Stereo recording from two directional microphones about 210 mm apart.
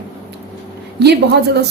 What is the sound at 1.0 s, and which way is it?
Speech, 50° right (ahead or behind).